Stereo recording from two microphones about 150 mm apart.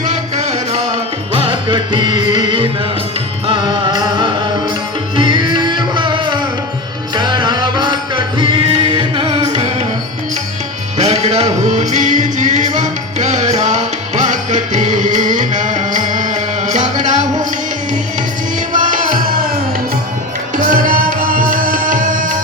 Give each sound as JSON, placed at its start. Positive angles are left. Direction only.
{"t": 0.1, "sound": "music", "side_deg": -45}
{"t": 10.9, "sound": "music", "side_deg": -45}
{"t": 18.7, "sound": "music", "side_deg": -60}
{"t": 20.6, "sound": "music", "side_deg": -65}